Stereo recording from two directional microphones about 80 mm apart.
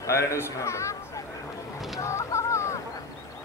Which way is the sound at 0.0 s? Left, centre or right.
Left.